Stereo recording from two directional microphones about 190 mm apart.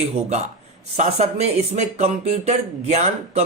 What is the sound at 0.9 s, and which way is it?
Speech, 35° right (ahead or behind).